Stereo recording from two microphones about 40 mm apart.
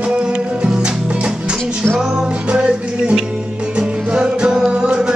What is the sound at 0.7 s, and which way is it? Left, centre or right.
Music, centre.